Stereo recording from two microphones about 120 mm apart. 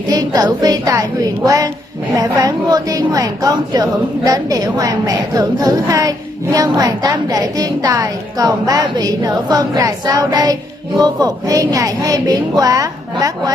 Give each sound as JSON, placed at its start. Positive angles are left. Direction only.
{"t": 0.1, "sound": "a woman's voice", "side_deg": -30}